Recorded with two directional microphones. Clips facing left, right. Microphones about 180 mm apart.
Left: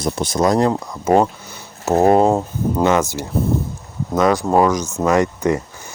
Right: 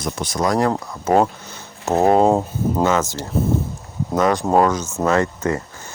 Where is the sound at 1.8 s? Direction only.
15° left (ahead or behind).